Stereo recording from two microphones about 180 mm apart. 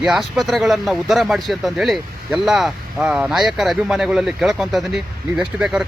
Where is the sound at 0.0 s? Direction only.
Centre (ahead or behind).